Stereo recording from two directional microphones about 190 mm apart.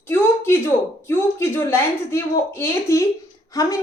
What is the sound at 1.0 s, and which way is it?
A woman's voice, 10° left (ahead or behind).